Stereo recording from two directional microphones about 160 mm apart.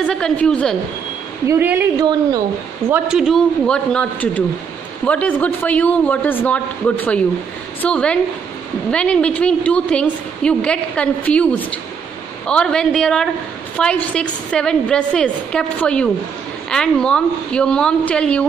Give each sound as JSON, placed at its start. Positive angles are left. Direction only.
{"t": 0.0, "sound": "a woman's voice", "side_deg": 5}
{"t": 1.5, "sound": "a woman's voice", "side_deg": -15}
{"t": 2.0, "sound": "a woman's voice", "side_deg": -25}
{"t": 2.9, "sound": "a woman's voice", "side_deg": -5}
{"t": 7.8, "sound": "a woman's voice", "side_deg": 5}